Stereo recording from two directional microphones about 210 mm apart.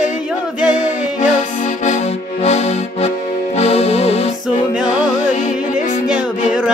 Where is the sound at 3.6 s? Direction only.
30° left (ahead or behind).